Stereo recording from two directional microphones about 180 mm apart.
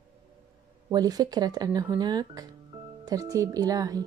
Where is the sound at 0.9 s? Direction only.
20° right (ahead or behind).